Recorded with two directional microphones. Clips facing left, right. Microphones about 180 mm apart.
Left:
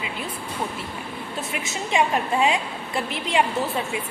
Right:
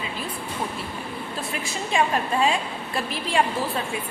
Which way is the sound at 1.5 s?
20° left (ahead or behind).